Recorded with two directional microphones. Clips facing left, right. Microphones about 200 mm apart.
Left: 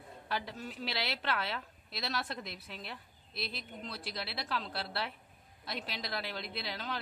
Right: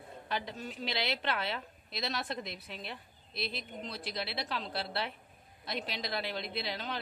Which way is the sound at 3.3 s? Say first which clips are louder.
Right 3 dB; centre (ahead or behind).